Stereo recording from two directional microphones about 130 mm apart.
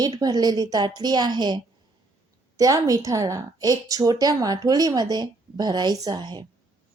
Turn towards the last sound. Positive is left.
turn(degrees=-35)  # may be behind; listen again after turning